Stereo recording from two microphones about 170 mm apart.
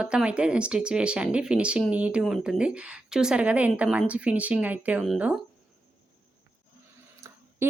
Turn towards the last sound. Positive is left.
turn(degrees=-15)  # may be behind; listen again after turning